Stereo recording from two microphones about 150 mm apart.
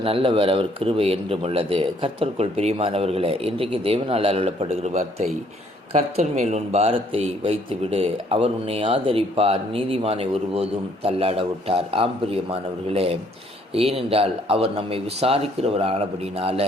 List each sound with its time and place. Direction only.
0.0 s a man's voice: 40° right (ahead or behind)